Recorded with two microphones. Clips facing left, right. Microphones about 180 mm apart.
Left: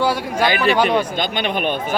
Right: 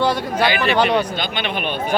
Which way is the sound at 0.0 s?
10° left (ahead or behind).